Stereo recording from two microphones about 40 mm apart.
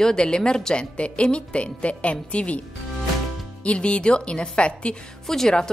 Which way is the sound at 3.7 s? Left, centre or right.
Left.